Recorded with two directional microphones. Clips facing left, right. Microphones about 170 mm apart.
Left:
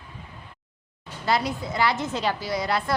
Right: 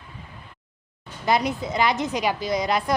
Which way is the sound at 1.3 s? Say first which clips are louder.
Right 2 dB; 20° right (ahead or behind).